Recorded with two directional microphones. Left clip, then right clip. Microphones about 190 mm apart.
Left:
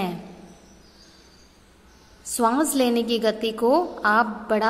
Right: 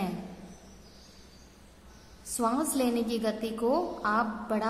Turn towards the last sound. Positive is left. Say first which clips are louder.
# left 9 dB
turn(degrees=20)  # may be behind; listen again after turning